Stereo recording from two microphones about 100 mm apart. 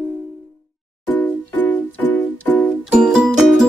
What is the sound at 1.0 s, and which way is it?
Music, 15° left (ahead or behind).